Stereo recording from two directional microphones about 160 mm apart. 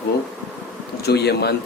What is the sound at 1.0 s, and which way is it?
Speech, 90° left.